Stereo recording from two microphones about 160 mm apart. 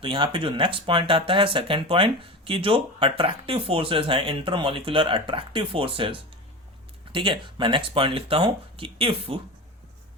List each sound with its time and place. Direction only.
0.0 s speech: 30° right (ahead or behind)